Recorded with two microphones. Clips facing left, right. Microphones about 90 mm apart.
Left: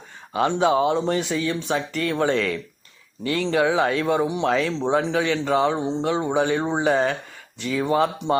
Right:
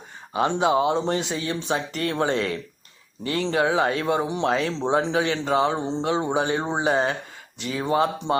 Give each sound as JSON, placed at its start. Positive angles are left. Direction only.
{"t": 0.3, "sound": "speech", "side_deg": -25}